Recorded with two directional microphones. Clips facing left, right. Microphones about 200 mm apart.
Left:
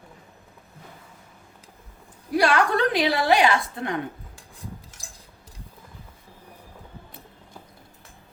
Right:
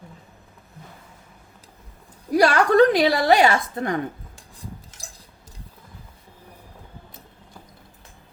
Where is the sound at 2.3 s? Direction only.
40° right (ahead or behind).